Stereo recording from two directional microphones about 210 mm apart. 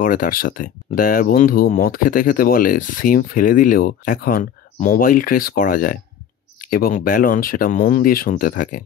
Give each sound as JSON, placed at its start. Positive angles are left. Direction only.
{"t": 0.0, "sound": "speech", "side_deg": 40}